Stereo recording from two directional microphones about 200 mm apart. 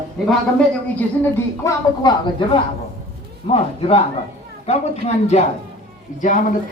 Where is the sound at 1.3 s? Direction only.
15° left (ahead or behind).